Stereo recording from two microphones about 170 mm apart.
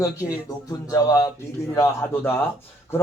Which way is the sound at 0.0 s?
20° left (ahead or behind).